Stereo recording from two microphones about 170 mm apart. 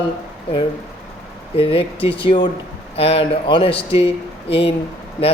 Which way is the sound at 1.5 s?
35° left (ahead or behind).